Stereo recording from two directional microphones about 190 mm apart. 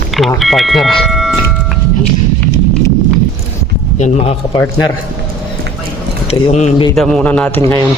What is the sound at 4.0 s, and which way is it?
Speech, 35° left (ahead or behind).